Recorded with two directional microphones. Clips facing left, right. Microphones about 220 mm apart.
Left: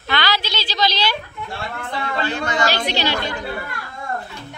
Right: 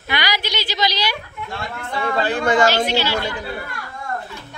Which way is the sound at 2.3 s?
50° right (ahead or behind).